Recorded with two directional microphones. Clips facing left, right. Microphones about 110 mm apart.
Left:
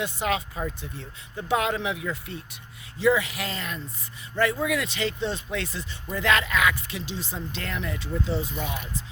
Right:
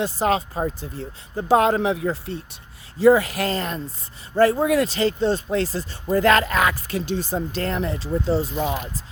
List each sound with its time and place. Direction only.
0.0 s speech: 35° right (ahead or behind)